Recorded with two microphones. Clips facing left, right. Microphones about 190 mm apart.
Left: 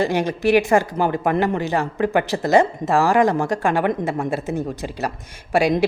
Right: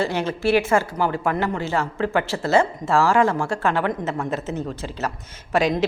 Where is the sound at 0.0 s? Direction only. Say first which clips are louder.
Left 3 dB; 15° left (ahead or behind).